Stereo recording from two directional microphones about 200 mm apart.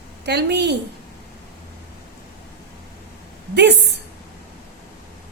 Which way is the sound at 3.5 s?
60° right (ahead or behind).